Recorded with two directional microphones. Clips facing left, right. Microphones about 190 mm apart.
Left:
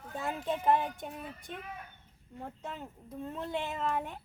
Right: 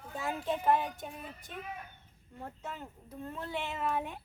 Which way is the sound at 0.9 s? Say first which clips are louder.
Left 2 dB; 50° left (ahead or behind).